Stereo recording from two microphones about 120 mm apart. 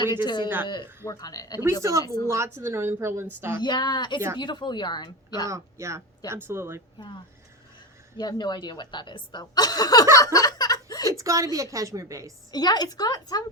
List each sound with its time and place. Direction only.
0.0 s a woman's voice: 40° left (ahead or behind)
0.4 s speech: 20° right (ahead or behind)
1.0 s a woman's voice: 30° left (ahead or behind)
1.8 s speech: 25° right (ahead or behind)
3.6 s a woman's voice: 35° left (ahead or behind)
5.5 s speech: 25° right (ahead or behind)
8.2 s a woman's voice: 40° left (ahead or behind)
10.3 s chuckle: 35° left (ahead or behind)
11.1 s speech: 25° right (ahead or behind)
12.5 s a woman's voice: 35° left (ahead or behind)